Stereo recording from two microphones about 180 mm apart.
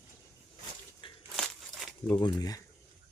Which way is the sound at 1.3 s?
Centre (ahead or behind).